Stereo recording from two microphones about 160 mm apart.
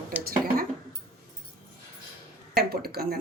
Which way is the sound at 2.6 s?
75° right (ahead or behind).